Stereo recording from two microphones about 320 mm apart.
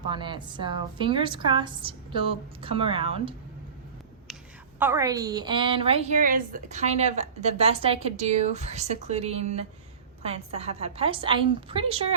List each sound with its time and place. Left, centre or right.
0.1 s a woman's voice: centre
4.8 s a woman's voice: centre